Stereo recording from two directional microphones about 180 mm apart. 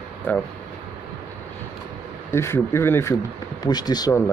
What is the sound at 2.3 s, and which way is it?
Speech, 15° left (ahead or behind).